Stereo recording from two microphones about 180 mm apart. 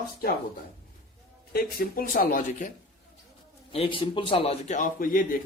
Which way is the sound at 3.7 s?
30° left (ahead or behind).